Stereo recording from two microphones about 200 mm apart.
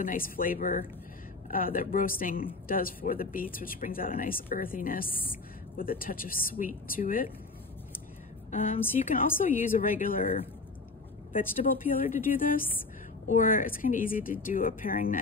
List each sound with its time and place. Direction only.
0.0 s a woman's voice: 45° left (ahead or behind)
8.5 s a woman's voice: 40° left (ahead or behind)